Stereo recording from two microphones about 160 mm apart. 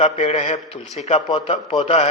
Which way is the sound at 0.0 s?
40° left (ahead or behind).